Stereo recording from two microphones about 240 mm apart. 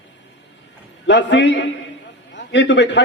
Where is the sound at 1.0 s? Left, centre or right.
Left.